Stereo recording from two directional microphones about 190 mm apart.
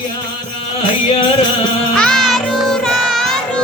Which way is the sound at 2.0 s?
Centre (ahead or behind).